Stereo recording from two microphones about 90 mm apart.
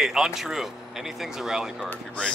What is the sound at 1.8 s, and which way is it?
Speech, 10° left (ahead or behind).